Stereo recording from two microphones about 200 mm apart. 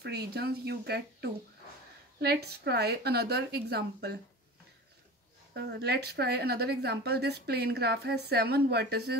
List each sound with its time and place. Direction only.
0.0 s speech: 55° right (ahead or behind)
5.5 s speech: 55° right (ahead or behind)